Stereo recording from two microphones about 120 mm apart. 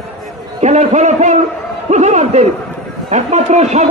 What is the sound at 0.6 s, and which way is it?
A man's voice, 75° right (ahead or behind).